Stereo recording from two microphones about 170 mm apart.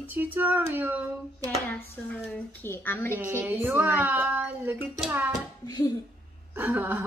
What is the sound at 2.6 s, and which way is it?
Speech, 15° left (ahead or behind).